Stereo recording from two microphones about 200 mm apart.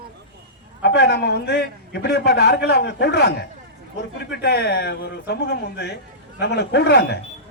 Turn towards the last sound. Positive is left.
turn(degrees=60)  # may be behind; listen again after turning